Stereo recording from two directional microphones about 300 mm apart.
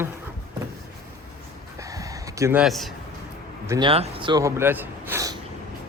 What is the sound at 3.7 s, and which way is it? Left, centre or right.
Speech, centre.